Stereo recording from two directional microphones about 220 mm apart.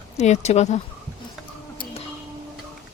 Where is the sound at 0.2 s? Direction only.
30° left (ahead or behind).